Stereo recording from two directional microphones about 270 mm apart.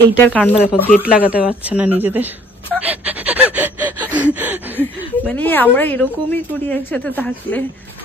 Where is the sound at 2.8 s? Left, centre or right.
Centre.